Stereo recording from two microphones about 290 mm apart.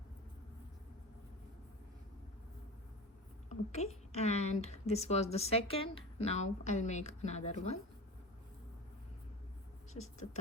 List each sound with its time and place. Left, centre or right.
3.5 s a woman's voice: left